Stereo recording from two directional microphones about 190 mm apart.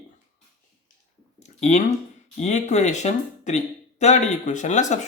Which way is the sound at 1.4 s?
35° left (ahead or behind).